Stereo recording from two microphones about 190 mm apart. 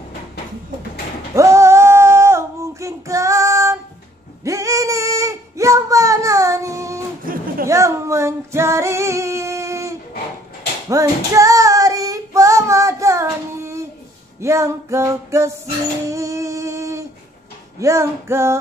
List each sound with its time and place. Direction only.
1.3 s a sound: 15° right (ahead or behind)
7.6 s female singing: 15° right (ahead or behind)
10.9 s child singing: 15° right (ahead or behind)
14.4 s music: 15° right (ahead or behind)
16.1 s a sound: 15° right (ahead or behind)
17.7 s music: 15° right (ahead or behind)